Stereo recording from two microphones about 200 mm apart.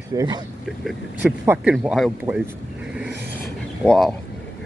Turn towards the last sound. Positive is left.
turn(degrees=0)  # may be behind; listen again after turning